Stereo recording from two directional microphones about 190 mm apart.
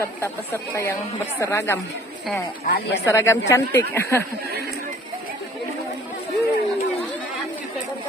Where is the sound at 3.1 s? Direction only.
15° left (ahead or behind).